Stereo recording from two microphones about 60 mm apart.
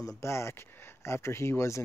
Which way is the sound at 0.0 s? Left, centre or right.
Left.